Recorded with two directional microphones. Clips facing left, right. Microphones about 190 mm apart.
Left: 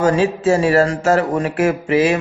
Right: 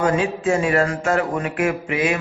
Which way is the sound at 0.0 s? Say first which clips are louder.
Left 4 dB; 40° left (ahead or behind).